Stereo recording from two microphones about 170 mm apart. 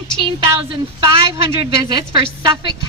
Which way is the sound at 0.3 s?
30° right (ahead or behind).